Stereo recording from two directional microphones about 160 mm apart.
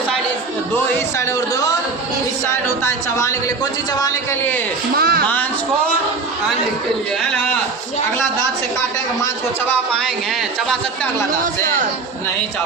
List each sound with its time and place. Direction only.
2.6 s a woman's voice: 20° left (ahead or behind)
4.9 s speech: 75° right (ahead or behind)
5.2 s a woman's voice: 10° left (ahead or behind)